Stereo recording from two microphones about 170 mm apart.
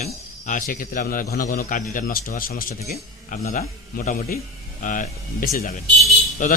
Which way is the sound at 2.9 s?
45° left (ahead or behind).